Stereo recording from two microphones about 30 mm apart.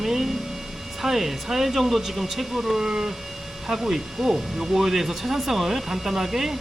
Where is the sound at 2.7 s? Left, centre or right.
Right.